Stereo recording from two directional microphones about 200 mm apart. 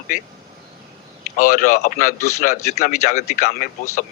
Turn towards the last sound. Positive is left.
turn(degrees=40)  # may be behind; listen again after turning